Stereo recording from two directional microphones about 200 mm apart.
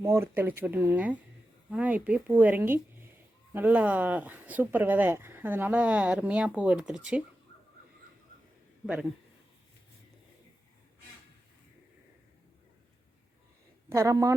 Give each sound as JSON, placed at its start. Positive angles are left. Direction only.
{"t": 0.0, "sound": "speech", "side_deg": -15}
{"t": 13.9, "sound": "speech", "side_deg": -15}